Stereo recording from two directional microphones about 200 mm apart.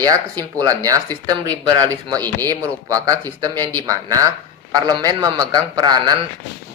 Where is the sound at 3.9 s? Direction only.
15° right (ahead or behind).